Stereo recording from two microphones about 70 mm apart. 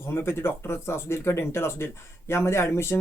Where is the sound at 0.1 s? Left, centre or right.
Left.